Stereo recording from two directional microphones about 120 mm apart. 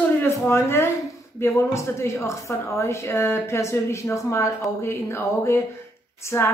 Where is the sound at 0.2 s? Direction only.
20° left (ahead or behind).